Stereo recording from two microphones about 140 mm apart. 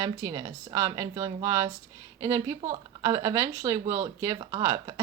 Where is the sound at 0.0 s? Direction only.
25° right (ahead or behind).